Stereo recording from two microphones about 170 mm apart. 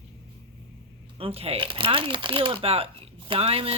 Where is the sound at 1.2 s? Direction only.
35° right (ahead or behind).